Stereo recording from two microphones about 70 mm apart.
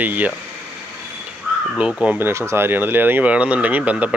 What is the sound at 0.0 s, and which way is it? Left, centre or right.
Speech, right.